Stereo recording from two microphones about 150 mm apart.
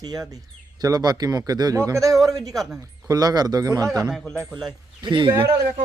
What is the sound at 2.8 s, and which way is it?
A man's voice, 25° right (ahead or behind).